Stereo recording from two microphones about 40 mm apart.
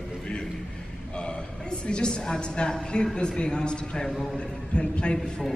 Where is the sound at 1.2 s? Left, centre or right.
Left.